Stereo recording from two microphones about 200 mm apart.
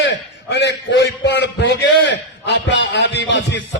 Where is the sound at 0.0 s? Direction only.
60° left (ahead or behind).